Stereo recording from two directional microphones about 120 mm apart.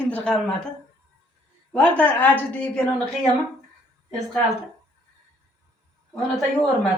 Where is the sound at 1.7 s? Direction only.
10° left (ahead or behind).